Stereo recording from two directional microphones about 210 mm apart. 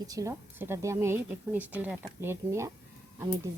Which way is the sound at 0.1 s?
15° right (ahead or behind).